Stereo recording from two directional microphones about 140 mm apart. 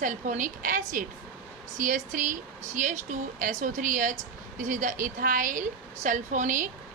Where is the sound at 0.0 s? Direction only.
65° right (ahead or behind).